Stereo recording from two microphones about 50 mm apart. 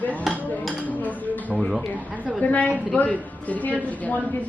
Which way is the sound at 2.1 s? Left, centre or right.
Right.